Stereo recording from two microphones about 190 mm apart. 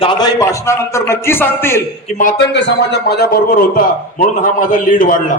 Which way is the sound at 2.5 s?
60° left (ahead or behind).